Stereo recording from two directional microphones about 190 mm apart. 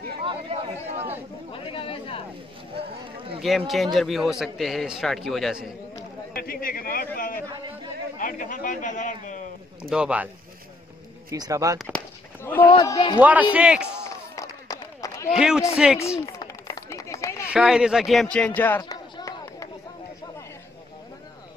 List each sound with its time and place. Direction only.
0.2 s chatter: 30° right (ahead or behind)
1.5 s speech: 30° left (ahead or behind)
3.4 s a man's voice: centre (ahead or behind)
6.3 s a man's voice: 50° left (ahead or behind)
7.4 s a sound: 25° right (ahead or behind)
8.2 s a man's voice: 45° left (ahead or behind)
9.8 s a man's voice: 5° right (ahead or behind)
11.2 s speech: 20° right (ahead or behind)
12.6 s speech: 20° left (ahead or behind)
13.2 s speech: 10° right (ahead or behind)
14.0 s run: 15° left (ahead or behind)
15.3 s a man's voice: 5° right (ahead or behind)
16.3 s a sound: 20° left (ahead or behind)
17.5 s speech: 5° right (ahead or behind); by 19.7 s 15° left (ahead or behind)